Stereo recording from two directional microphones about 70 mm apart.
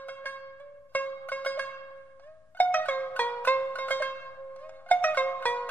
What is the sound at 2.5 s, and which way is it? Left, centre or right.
Zither, left.